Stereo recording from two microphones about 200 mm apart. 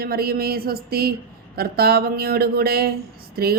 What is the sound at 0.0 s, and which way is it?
Speech, 50° right (ahead or behind).